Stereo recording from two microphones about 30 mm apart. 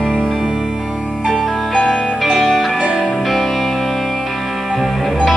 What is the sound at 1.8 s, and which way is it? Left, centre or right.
Music, centre.